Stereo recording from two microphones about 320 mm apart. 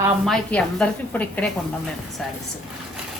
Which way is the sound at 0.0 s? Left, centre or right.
Centre.